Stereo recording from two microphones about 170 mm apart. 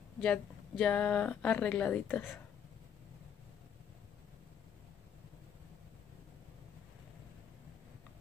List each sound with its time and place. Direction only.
0.2 s speech: 5° left (ahead or behind)